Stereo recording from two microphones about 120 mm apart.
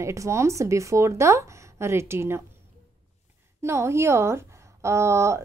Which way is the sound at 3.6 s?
25° right (ahead or behind).